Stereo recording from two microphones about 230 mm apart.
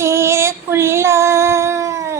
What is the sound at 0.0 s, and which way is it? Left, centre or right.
Child singing, centre.